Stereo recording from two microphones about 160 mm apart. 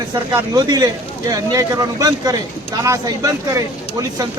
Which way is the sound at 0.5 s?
25° right (ahead or behind).